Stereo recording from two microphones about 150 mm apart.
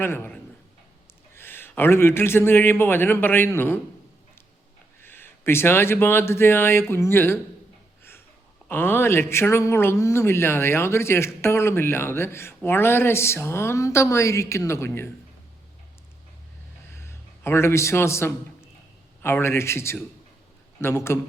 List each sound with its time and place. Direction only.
0.0 s speech: 15° left (ahead or behind)
4.9 s speech: 15° left (ahead or behind)
8.7 s speech: 15° left (ahead or behind)
17.0 s a sound: 15° left (ahead or behind)
19.2 s speech: 15° left (ahead or behind)